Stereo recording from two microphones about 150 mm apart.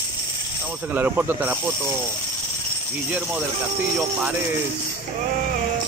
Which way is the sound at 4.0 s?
10° right (ahead or behind).